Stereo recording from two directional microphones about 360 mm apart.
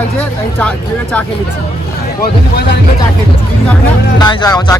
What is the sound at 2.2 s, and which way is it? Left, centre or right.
Speech, left.